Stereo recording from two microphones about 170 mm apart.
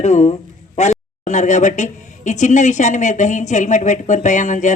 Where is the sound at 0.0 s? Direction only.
40° left (ahead or behind).